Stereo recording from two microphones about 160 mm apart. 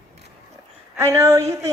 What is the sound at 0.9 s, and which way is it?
Speech, 15° right (ahead or behind).